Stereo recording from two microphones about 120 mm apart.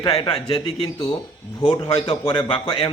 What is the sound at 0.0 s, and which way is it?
A man's voice, 45° left (ahead or behind).